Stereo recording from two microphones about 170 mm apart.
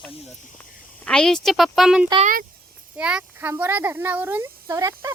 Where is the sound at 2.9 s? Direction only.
5° right (ahead or behind).